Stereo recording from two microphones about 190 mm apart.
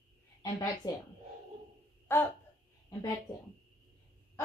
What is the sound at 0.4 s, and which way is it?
Speech, 15° left (ahead or behind).